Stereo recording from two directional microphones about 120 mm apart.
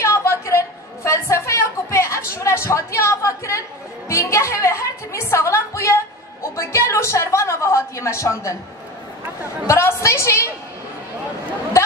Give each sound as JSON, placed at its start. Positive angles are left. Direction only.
{"t": 0.0, "sound": "a sound", "side_deg": 25}
{"t": 4.1, "sound": "music", "side_deg": 25}
{"t": 9.7, "sound": "a woman's voice", "side_deg": 20}